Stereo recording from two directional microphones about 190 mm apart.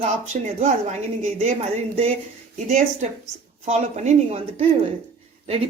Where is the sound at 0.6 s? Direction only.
40° right (ahead or behind).